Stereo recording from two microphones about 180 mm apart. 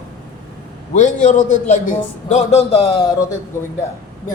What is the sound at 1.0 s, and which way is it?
A man's voice, 45° left (ahead or behind).